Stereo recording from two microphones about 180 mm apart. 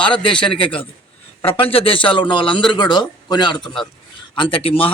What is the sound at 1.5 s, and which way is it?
Speech, 30° left (ahead or behind).